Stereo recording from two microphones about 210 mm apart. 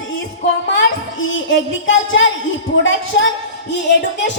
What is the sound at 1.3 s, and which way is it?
Speech, 65° left (ahead or behind).